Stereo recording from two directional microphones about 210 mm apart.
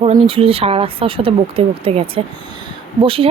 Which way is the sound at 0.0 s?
25° right (ahead or behind).